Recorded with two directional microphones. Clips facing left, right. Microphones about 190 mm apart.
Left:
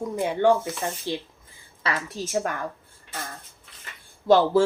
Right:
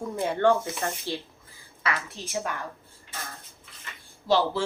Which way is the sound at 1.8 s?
40° left (ahead or behind).